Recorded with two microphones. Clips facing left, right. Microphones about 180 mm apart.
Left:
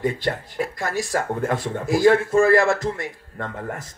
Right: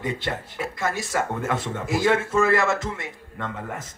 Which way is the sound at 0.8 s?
20° right (ahead or behind).